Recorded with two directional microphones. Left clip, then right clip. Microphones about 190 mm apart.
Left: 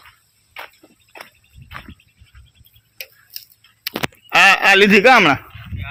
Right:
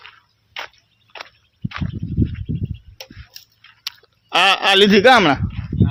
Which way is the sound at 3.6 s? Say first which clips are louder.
Left 8 dB; centre (ahead or behind).